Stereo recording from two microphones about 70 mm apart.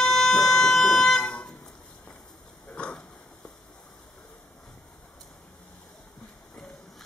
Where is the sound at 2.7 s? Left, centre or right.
Centre.